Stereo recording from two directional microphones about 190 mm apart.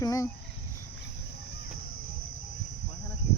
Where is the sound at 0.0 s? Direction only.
15° left (ahead or behind).